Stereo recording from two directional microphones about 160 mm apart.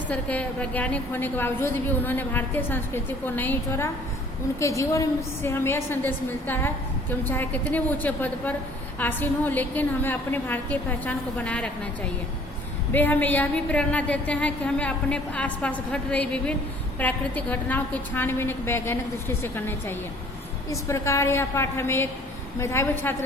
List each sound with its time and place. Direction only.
0.1 s a woman's voice: 10° left (ahead or behind)
12.9 s a woman's voice: 10° left (ahead or behind)